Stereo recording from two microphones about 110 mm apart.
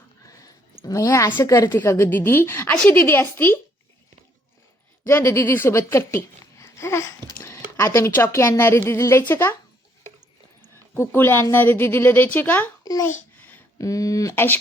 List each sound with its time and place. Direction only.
0.3 s a sound: 30° left (ahead or behind)
1.5 s a woman's voice: 30° left (ahead or behind)
5.0 s a woman's voice: 25° left (ahead or behind)
10.9 s a woman's voice: 25° left (ahead or behind)
12.8 s babbling: 35° left (ahead or behind)
13.7 s a woman's voice: 30° left (ahead or behind)